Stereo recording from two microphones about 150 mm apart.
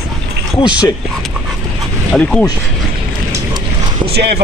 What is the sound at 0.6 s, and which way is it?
Speech, 30° left (ahead or behind).